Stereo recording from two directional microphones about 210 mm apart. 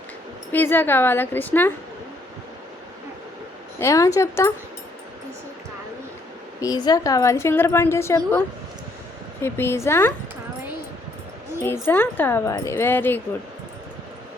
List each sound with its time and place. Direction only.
0.5 s a woman's voice: 10° left (ahead or behind)
3.8 s a woman's voice: 15° left (ahead or behind)
6.6 s a woman's voice: 20° left (ahead or behind)
9.4 s a woman's voice: 10° left (ahead or behind)
11.6 s a woman's voice: 10° left (ahead or behind)